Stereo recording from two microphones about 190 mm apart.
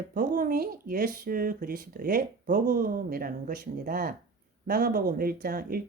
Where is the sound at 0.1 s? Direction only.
45° right (ahead or behind).